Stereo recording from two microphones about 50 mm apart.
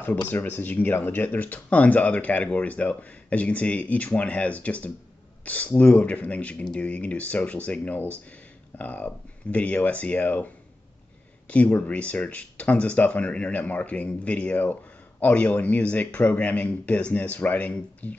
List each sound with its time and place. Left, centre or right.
0.0 s speech: left